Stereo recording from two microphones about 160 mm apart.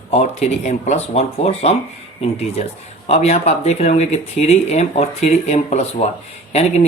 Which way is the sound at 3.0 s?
40° left (ahead or behind).